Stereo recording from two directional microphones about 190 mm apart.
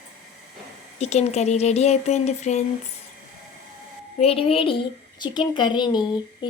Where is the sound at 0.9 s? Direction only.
35° left (ahead or behind).